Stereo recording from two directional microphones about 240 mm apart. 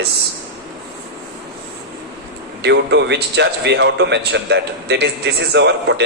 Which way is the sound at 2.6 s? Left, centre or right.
Right.